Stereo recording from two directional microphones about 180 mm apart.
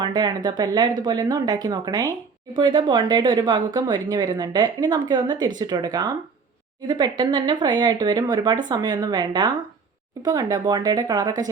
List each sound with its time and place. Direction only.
0.0 s speech: 25° right (ahead or behind)